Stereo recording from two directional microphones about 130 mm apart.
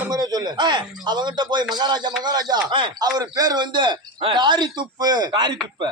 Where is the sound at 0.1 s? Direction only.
30° right (ahead or behind).